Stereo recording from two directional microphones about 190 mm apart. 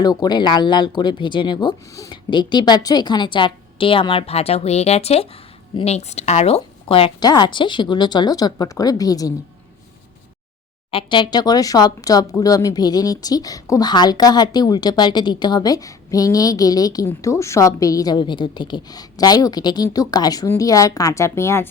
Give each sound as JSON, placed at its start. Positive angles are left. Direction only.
{"t": 0.0, "sound": "speech", "side_deg": 20}
{"t": 10.9, "sound": "speech", "side_deg": 25}